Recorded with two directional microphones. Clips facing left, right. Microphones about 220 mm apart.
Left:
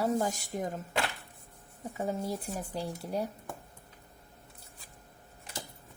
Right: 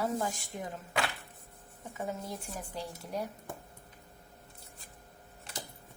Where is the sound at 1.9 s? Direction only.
35° left (ahead or behind).